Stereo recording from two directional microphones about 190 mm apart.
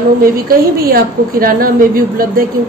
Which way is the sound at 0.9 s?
50° right (ahead or behind).